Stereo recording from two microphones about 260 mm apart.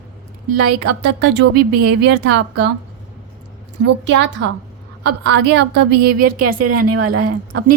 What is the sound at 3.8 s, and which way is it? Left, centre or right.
A woman's voice, right.